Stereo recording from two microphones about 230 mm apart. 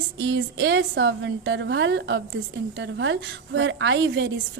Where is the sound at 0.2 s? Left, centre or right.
Right.